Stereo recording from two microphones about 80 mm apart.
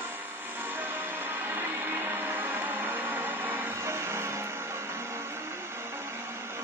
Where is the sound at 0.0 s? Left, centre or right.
Right.